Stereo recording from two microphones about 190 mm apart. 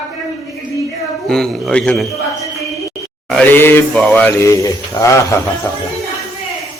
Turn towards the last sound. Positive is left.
turn(degrees=15)  # may be behind; listen again after turning